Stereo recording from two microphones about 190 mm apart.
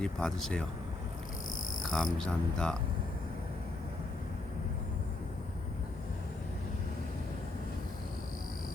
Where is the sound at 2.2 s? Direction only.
5° left (ahead or behind).